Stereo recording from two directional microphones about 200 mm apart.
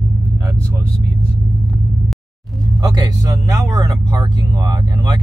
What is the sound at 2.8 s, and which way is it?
Speech, 20° right (ahead or behind).